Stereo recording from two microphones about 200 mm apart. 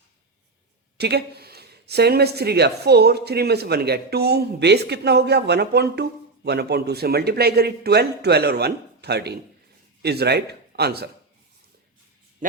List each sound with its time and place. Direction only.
0.9 s a man's voice: 55° right (ahead or behind)